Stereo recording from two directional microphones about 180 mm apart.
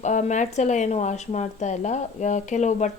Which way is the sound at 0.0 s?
40° left (ahead or behind).